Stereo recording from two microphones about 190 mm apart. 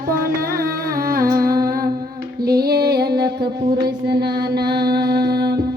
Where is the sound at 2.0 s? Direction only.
55° right (ahead or behind).